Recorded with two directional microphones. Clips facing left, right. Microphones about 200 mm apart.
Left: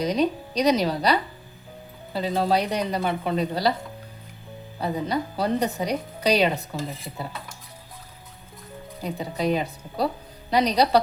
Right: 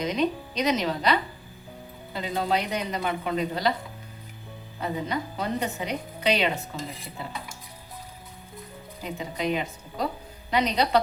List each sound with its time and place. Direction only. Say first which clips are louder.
0.0 s a woman's voice: left 3 dB; 35° left (ahead or behind)
4.8 s a woman's voice: left 3 dB; 35° left (ahead or behind)
9.0 s a woman's voice: left 3 dB; 35° left (ahead or behind)